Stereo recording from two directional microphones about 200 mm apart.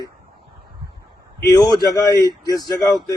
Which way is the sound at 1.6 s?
20° left (ahead or behind).